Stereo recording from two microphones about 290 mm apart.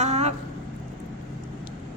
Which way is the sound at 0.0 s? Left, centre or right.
Right.